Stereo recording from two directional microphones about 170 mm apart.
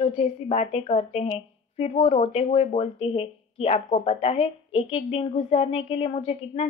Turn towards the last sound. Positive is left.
turn(degrees=40)  # may be behind; listen again after turning